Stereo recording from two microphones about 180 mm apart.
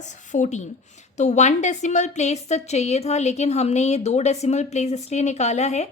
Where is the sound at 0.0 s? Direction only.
40° left (ahead or behind).